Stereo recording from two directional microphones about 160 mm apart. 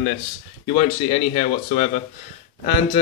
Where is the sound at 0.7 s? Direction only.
35° left (ahead or behind).